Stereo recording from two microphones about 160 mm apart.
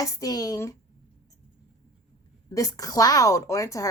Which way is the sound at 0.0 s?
25° left (ahead or behind).